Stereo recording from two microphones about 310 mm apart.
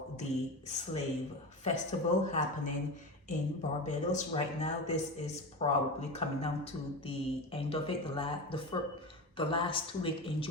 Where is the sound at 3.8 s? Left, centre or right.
Left.